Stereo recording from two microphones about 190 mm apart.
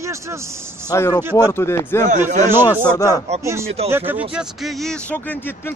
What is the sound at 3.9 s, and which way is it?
Speech, 10° right (ahead or behind).